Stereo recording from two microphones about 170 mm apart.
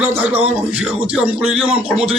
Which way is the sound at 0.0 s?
10° right (ahead or behind).